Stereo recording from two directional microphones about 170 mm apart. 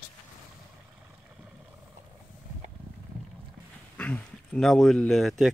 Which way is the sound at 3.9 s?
5° left (ahead or behind).